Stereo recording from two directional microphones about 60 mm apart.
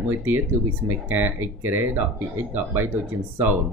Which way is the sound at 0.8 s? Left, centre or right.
Right.